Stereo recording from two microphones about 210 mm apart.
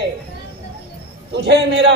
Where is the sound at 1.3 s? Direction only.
55° right (ahead or behind).